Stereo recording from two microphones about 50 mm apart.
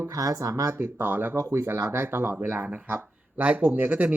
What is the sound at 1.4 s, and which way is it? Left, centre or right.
Speech, right.